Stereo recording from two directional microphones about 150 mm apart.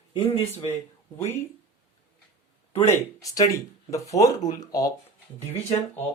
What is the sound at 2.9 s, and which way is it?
Speech, 20° left (ahead or behind).